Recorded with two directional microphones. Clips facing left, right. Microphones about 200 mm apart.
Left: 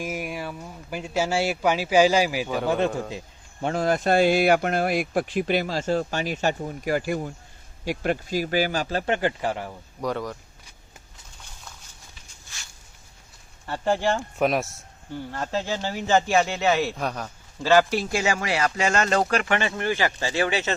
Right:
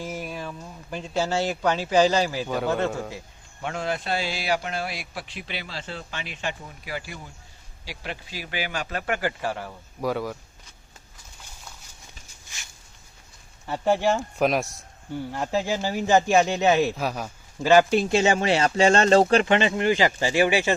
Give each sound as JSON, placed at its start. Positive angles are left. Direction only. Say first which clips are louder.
{"t": 0.0, "sound": "speech", "louder": "left 2 dB", "side_deg": 15}
{"t": 3.6, "sound": "a man's voice", "louder": "left 6 dB", "side_deg": 35}
{"t": 10.0, "sound": "speech", "louder": "right 1 dB", "side_deg": -5}
{"t": 13.7, "sound": "speech", "louder": "right 2 dB", "side_deg": -10}
{"t": 15.1, "sound": "speech", "louder": "right 2 dB", "side_deg": -10}
{"t": 16.9, "sound": "a man's voice", "louder": "right 1 dB", "side_deg": -5}